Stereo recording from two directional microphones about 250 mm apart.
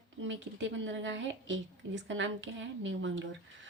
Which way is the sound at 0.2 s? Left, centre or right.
Right.